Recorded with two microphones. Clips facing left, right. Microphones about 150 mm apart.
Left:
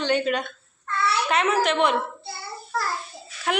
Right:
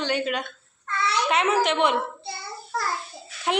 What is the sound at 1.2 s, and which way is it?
Speech, 15° right (ahead or behind).